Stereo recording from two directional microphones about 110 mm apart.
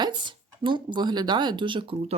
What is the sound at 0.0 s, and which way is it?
Speech, 45° right (ahead or behind).